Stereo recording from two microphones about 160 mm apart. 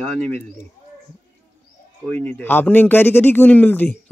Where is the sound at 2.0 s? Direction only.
10° left (ahead or behind).